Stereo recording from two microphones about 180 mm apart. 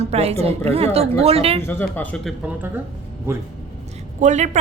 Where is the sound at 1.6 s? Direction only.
10° left (ahead or behind).